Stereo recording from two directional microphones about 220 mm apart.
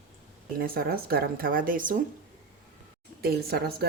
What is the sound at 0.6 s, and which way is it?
Speech, 40° right (ahead or behind).